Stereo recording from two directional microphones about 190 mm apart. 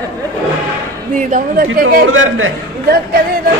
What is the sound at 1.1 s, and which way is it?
Speech, 45° right (ahead or behind).